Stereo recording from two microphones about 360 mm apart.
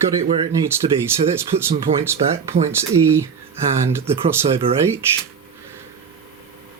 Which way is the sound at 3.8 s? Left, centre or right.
Centre.